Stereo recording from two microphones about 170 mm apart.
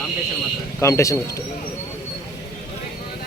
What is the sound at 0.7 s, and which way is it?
Speech, 15° left (ahead or behind).